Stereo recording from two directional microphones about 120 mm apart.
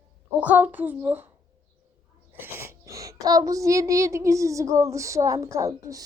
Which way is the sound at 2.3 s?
20° right (ahead or behind).